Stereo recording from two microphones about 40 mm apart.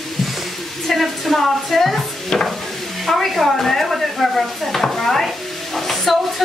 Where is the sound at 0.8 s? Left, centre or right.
Centre.